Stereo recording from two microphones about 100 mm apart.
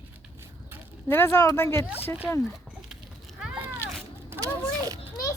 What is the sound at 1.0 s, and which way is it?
Speech, 25° left (ahead or behind).